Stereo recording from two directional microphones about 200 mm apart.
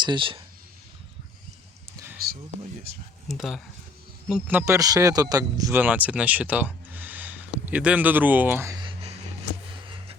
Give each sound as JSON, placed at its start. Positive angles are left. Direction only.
{"t": 0.0, "sound": "speech", "side_deg": -25}
{"t": 3.2, "sound": "speech", "side_deg": 0}